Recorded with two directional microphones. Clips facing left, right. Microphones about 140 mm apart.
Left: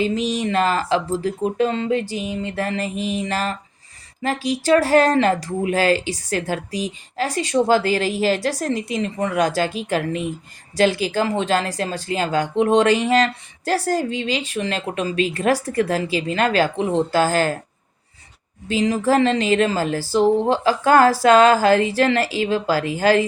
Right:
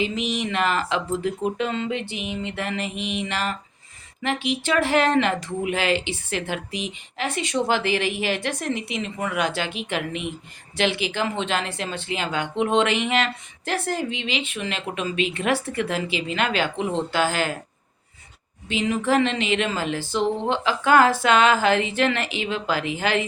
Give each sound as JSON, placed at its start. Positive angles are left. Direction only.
{"t": 0.3, "sound": "speech", "side_deg": 35}
{"t": 18.7, "sound": "speech", "side_deg": 35}